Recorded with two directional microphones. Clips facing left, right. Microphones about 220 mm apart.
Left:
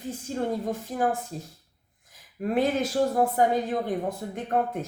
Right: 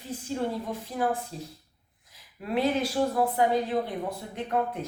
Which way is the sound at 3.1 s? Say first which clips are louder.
Even; 45° left (ahead or behind).